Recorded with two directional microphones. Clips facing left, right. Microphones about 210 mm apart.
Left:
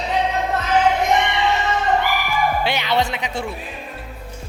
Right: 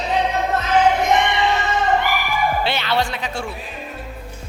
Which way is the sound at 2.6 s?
15° left (ahead or behind).